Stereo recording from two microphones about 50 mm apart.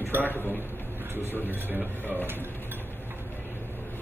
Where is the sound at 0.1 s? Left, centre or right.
Right.